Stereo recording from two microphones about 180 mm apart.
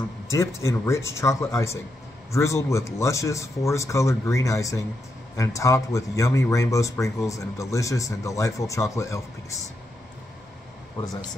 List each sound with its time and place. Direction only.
0.3 s speech: 15° left (ahead or behind)